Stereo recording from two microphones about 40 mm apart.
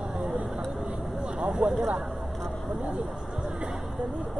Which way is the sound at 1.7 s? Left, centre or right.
Right.